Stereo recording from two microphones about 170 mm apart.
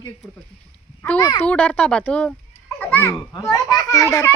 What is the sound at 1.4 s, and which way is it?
A child's voice, 5° left (ahead or behind).